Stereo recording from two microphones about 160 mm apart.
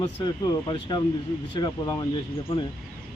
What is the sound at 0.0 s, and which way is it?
Speech, 25° left (ahead or behind).